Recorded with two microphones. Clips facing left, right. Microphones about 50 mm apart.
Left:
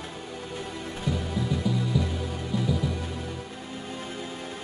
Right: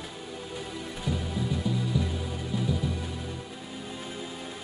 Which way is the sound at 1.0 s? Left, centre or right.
Centre.